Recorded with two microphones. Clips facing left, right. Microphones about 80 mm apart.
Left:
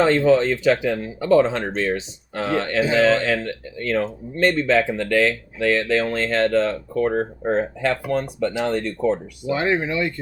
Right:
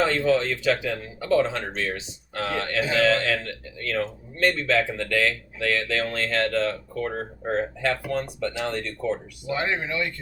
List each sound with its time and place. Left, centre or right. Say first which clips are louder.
0.0 s speech: left 6 dB; left
9.5 s speech: left 5 dB; left